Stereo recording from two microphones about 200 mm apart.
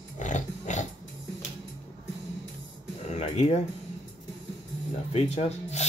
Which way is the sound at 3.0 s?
35° left (ahead or behind).